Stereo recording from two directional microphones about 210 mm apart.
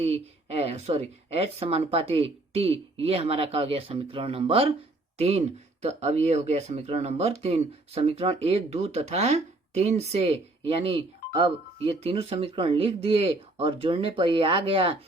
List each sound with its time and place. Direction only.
0.0 s speech: 30° right (ahead or behind)